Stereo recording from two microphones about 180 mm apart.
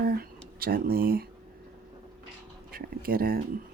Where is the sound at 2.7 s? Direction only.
55° right (ahead or behind).